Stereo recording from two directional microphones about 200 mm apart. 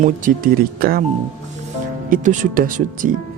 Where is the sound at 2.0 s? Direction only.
40° right (ahead or behind).